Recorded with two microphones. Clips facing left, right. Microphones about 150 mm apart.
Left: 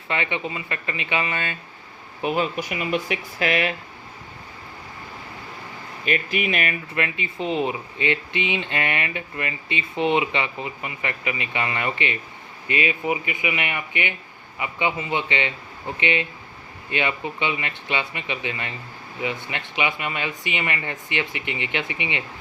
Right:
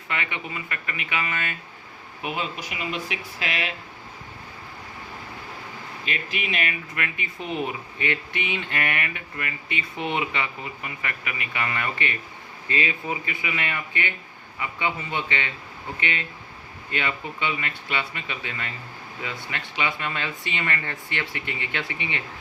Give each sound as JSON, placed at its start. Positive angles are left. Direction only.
{"t": 0.1, "sound": "speech", "side_deg": 25}
{"t": 2.2, "sound": "speech", "side_deg": 45}
{"t": 6.1, "sound": "speech", "side_deg": 50}
{"t": 6.9, "sound": "speech", "side_deg": 25}